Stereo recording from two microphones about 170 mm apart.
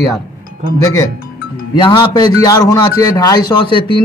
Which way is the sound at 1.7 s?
25° left (ahead or behind).